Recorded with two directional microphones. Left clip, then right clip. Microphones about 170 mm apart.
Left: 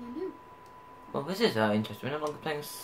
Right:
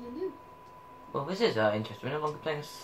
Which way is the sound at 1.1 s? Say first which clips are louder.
Even; 65° left (ahead or behind).